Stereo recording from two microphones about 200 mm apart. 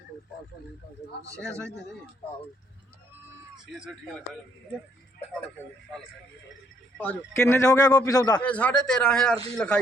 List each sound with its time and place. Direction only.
1.5 s a man's voice: 5° left (ahead or behind)
3.8 s a man's voice: centre (ahead or behind)
6.9 s a man's voice: 10° left (ahead or behind)
8.4 s a man's voice: 5° left (ahead or behind)